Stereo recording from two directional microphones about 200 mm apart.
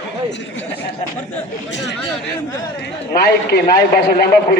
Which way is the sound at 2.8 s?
50° left (ahead or behind).